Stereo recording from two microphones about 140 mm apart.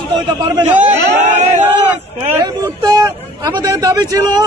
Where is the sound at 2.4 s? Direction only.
30° right (ahead or behind).